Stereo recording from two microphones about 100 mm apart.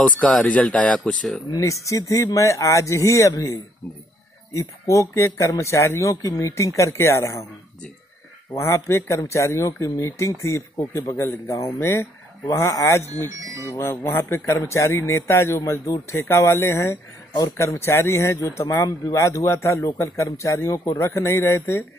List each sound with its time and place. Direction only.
0.0 s speech: 5° left (ahead or behind)
1.6 s speech: 30° left (ahead or behind)
4.6 s speech: 30° left (ahead or behind)
8.5 s speech: 30° left (ahead or behind)
13.4 s speech: 30° right (ahead or behind)
13.7 s speech: 25° left (ahead or behind)